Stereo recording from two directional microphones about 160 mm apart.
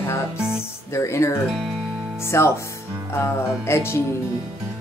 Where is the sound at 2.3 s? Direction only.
15° left (ahead or behind).